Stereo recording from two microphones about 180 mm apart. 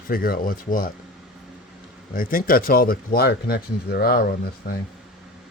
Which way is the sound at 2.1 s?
50° left (ahead or behind).